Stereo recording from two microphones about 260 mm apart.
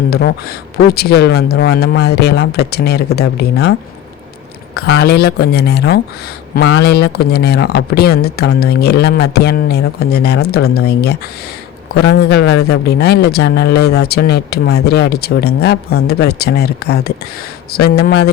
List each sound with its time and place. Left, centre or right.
0.1 s speech: left
4.8 s speech: left